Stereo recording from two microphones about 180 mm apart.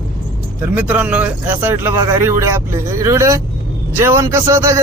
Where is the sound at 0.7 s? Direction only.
10° right (ahead or behind).